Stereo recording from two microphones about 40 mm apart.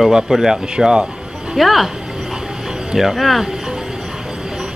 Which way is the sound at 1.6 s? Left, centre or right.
Centre.